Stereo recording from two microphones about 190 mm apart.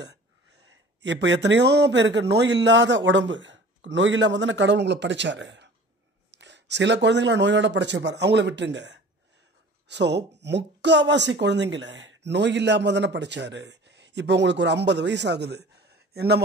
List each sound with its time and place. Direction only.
0.0 s speech: 65° right (ahead or behind)